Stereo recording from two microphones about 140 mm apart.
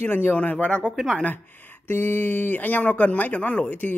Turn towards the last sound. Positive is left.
turn(degrees=10)  # may be behind; listen again after turning